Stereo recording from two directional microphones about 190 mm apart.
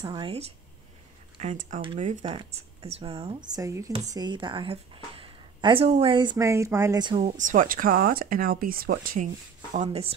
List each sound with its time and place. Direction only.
0.0 s a woman's voice: 25° right (ahead or behind)
1.4 s a woman's voice: 40° right (ahead or behind); by 7.3 s 25° right (ahead or behind)
7.3 s speech: 40° right (ahead or behind)
9.8 s speech: 30° right (ahead or behind)